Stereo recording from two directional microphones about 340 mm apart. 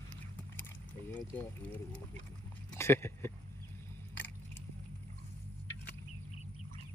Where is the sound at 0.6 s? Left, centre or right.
Centre.